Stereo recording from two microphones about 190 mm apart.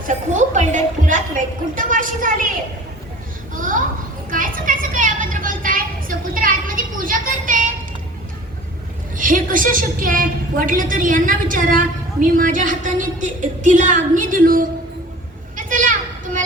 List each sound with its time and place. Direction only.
0.1 s a woman's voice: 40° right (ahead or behind)
3.5 s a child's voice: 45° right (ahead or behind)
4.3 s a sound: 45° right (ahead or behind)
9.1 s a woman's voice: 45° right (ahead or behind)
15.5 s children playing: 45° right (ahead or behind)